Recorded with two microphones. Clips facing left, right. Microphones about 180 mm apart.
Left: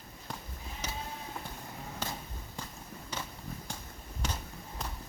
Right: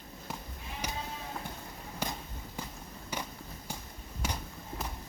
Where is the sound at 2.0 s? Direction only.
10° right (ahead or behind).